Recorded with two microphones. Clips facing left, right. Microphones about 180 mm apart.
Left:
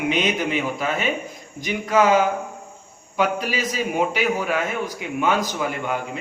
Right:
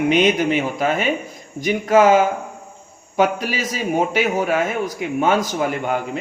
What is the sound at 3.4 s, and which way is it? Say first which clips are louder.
A man's voice: right 2 dB; 40° right (ahead or behind).